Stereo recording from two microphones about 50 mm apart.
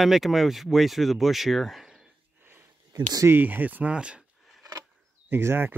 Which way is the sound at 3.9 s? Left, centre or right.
Centre.